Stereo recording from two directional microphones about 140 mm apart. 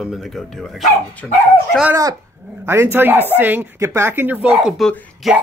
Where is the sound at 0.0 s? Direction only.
Centre (ahead or behind).